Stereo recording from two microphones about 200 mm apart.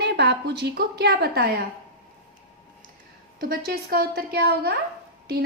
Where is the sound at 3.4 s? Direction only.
50° right (ahead or behind).